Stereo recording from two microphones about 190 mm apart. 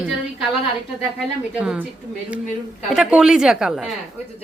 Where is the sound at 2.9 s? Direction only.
5° right (ahead or behind).